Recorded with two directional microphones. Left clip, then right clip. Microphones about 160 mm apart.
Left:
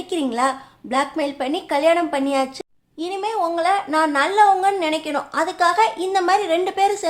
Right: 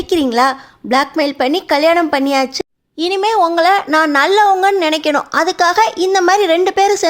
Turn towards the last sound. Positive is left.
turn(degrees=-40)  # may be behind; listen again after turning